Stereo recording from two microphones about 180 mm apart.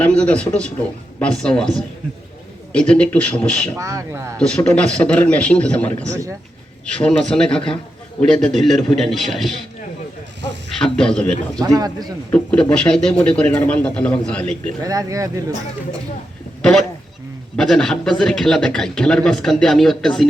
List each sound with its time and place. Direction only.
0.0 s a man's voice: 5° left (ahead or behind)
3.8 s speech: 15° right (ahead or behind)
4.4 s a man's voice: 5° left (ahead or behind)
6.1 s speech: 15° right (ahead or behind)
7.0 s a man's voice: 5° left (ahead or behind)
10.8 s a man's voice: 5° left (ahead or behind)
11.6 s speech: 20° right (ahead or behind)
12.3 s a man's voice: 10° left (ahead or behind)
14.8 s speech: 20° right (ahead or behind)
17.6 s a man's voice: centre (ahead or behind)